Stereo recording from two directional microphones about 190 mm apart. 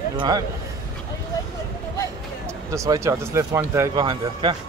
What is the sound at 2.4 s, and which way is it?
Speech, 15° right (ahead or behind).